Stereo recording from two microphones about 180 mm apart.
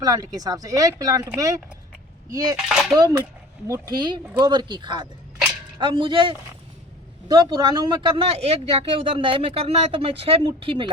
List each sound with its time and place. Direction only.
0.0 s speech: 20° right (ahead or behind)
2.6 s speech: centre (ahead or behind)
2.9 s speech: 20° right (ahead or behind)